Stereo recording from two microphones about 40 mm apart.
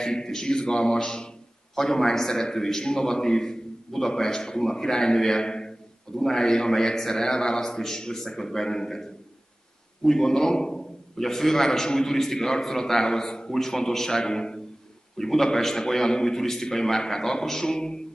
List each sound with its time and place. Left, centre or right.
0.0 s a man's voice: centre